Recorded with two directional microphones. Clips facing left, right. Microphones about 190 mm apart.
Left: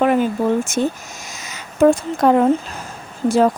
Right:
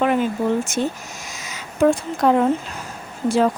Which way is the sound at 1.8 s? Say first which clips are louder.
Left 3 dB; 45° left (ahead or behind).